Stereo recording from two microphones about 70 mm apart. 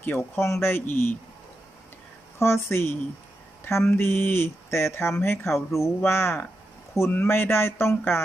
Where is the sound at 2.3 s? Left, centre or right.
Left.